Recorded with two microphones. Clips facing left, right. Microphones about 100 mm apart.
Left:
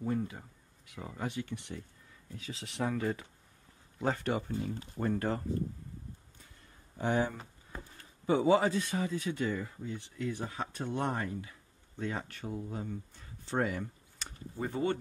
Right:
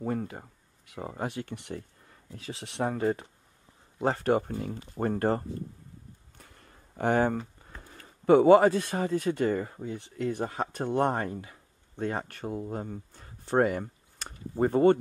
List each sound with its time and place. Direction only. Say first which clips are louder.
0.0 s speech: right 2 dB; 50° right (ahead or behind)
2.8 s speech: right 5 dB; 35° right (ahead or behind)
6.3 s a sound: right 4 dB; 60° right (ahead or behind)
8.3 s speech: right 8 dB; 60° right (ahead or behind)